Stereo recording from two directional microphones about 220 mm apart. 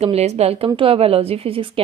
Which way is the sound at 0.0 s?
30° right (ahead or behind).